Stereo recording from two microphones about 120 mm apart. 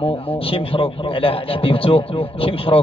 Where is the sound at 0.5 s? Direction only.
50° left (ahead or behind).